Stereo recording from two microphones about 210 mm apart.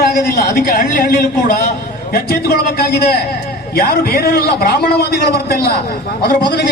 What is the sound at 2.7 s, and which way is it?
A man's voice, 50° left (ahead or behind).